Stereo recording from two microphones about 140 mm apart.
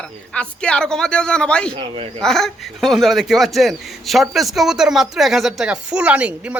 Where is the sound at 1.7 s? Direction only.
40° right (ahead or behind).